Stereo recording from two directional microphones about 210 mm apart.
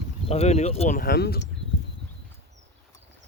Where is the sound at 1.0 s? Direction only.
50° left (ahead or behind).